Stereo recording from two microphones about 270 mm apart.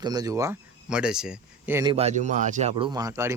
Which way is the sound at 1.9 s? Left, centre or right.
Right.